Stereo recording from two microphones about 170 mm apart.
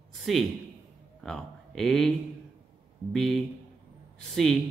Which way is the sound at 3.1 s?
Centre (ahead or behind).